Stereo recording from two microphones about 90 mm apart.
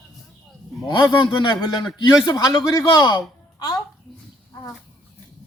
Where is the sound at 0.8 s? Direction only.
60° left (ahead or behind).